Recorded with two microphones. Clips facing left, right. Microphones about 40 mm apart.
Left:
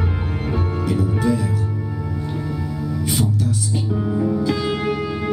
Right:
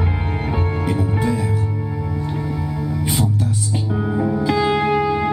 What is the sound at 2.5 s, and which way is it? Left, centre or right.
Music, right.